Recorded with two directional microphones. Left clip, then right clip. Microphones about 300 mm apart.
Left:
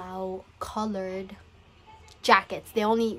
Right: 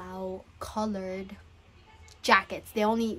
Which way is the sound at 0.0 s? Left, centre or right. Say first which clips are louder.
Left 3 dB; centre.